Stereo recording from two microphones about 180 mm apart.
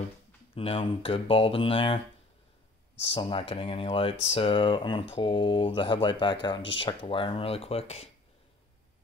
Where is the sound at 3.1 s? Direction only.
30° left (ahead or behind).